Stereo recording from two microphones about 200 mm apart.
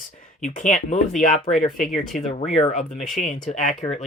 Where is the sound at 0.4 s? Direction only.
40° left (ahead or behind).